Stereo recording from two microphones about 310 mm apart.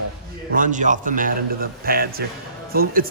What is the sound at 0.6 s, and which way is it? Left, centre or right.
Speech, right.